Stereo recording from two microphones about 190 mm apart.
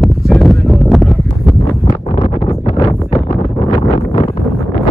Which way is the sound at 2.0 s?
35° left (ahead or behind).